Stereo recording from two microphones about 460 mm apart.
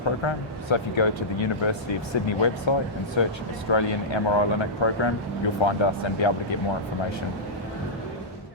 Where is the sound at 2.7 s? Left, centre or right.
Left.